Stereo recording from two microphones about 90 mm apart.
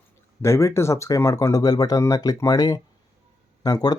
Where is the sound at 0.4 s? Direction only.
30° left (ahead or behind).